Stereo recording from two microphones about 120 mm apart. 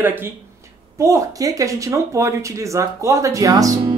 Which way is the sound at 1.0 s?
25° right (ahead or behind).